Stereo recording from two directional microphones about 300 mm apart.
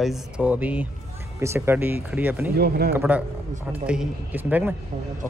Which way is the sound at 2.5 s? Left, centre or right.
Right.